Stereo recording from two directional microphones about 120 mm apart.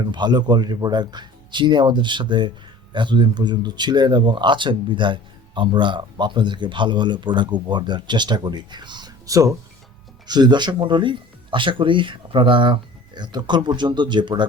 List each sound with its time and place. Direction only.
0.0 s speech: 40° right (ahead or behind)